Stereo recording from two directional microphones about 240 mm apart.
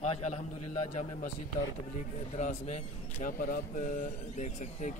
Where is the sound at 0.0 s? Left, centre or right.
Left.